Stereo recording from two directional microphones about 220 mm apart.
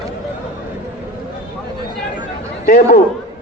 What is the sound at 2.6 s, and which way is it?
Speech, 40° left (ahead or behind).